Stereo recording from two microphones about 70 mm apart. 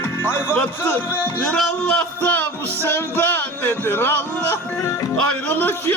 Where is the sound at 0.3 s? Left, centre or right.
Left.